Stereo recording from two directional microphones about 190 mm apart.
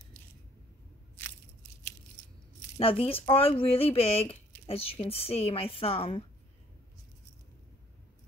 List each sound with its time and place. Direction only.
2.8 s speech: 30° left (ahead or behind)